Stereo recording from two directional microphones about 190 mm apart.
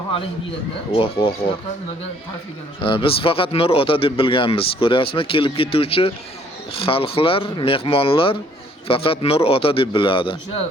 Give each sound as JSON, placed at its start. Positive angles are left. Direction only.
{"t": 0.9, "sound": "speech", "side_deg": 30}
{"t": 2.8, "sound": "speech", "side_deg": 25}